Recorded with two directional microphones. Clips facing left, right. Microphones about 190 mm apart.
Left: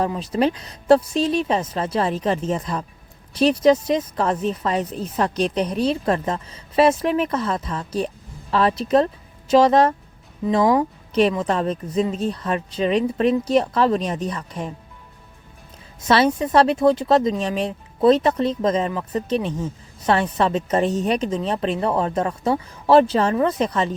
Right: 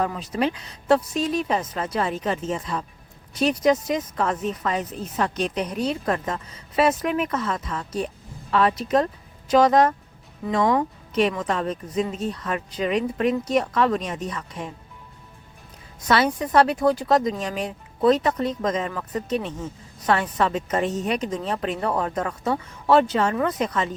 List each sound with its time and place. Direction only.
0.0 s a woman's voice: 30° left (ahead or behind)
11.1 s speech: 35° left (ahead or behind)
16.0 s a woman's voice: 25° left (ahead or behind)